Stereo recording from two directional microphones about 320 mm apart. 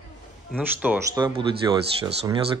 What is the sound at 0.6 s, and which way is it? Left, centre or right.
Speech, centre.